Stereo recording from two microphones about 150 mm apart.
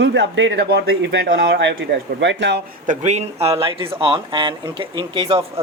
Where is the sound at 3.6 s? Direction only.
35° right (ahead or behind).